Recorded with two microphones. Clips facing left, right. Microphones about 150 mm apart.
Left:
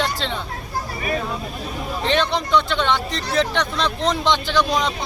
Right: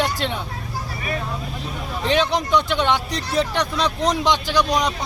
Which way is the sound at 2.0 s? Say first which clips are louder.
Right 1 dB; 10° right (ahead or behind).